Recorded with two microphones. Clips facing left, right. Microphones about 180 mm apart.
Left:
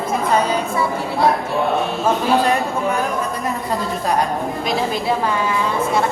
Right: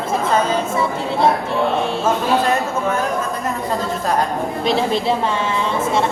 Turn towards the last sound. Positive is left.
turn(degrees=-25)  # may be behind; listen again after turning